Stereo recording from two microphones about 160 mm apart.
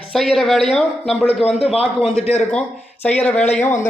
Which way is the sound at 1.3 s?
40° left (ahead or behind).